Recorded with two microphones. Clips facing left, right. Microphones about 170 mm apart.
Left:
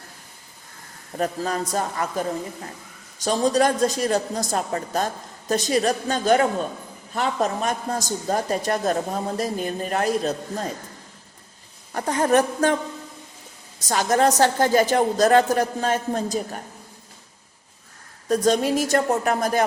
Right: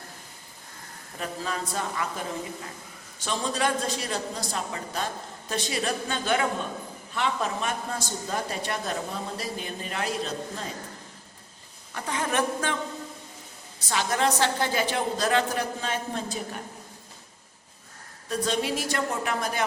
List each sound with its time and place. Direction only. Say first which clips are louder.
1.1 s a man's voice: left 8 dB; 45° left (ahead or behind)
11.9 s a man's voice: left 9 dB; 45° left (ahead or behind)
13.7 s a man's voice: left 7 dB; 40° left (ahead or behind)
18.3 s a man's voice: left 8 dB; 45° left (ahead or behind)